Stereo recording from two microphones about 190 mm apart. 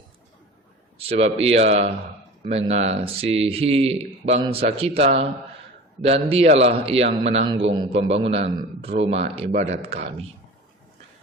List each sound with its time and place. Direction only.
0.9 s speech: 30° right (ahead or behind)